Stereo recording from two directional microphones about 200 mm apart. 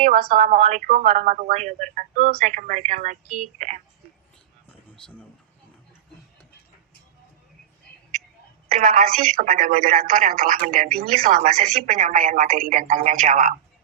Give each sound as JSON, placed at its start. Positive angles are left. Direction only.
{"t": 0.0, "sound": "a woman's voice", "side_deg": -45}
{"t": 8.7, "sound": "speech", "side_deg": -40}